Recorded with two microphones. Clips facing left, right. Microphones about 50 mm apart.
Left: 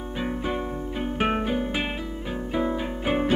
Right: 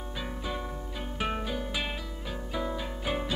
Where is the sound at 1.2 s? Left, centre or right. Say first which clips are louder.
Left 7 dB; left.